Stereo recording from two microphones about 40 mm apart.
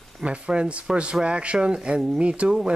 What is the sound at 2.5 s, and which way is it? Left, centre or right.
Speech, centre.